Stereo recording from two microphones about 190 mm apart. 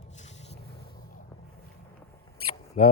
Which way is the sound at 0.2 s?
35° left (ahead or behind).